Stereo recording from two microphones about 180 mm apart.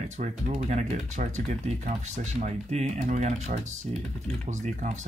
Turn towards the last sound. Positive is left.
turn(degrees=-40)  # may be behind; listen again after turning